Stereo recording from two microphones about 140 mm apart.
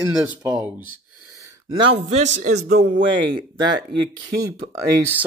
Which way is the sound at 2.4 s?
85° right.